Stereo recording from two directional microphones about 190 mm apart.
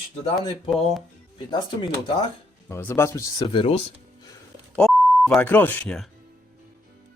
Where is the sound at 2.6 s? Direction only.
10° left (ahead or behind).